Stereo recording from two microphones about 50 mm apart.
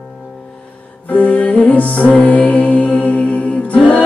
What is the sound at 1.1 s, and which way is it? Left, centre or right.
Music, left.